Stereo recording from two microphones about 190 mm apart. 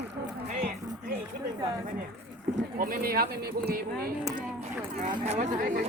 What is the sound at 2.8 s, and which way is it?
Speech, 50° right (ahead or behind).